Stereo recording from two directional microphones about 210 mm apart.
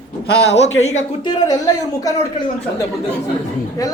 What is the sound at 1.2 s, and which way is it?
Speech, 20° left (ahead or behind).